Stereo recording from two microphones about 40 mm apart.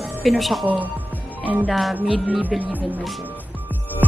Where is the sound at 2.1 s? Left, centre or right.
Right.